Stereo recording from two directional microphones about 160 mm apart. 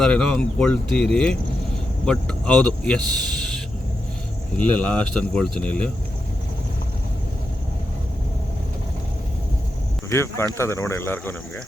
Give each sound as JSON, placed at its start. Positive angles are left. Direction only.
{"t": 0.0, "sound": "speech", "side_deg": 5}
{"t": 4.5, "sound": "speech", "side_deg": 10}
{"t": 10.1, "sound": "speech", "side_deg": 15}